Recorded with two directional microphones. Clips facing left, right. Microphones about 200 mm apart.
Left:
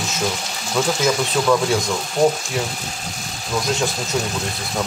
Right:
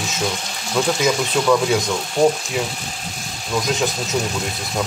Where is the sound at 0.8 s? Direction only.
Centre (ahead or behind).